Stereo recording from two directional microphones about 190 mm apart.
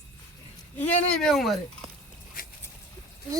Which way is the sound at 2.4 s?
50° left (ahead or behind).